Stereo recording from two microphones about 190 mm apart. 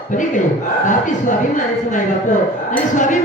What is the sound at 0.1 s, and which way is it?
Speech, 40° left (ahead or behind).